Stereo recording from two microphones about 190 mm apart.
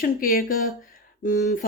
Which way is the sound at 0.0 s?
50° left (ahead or behind).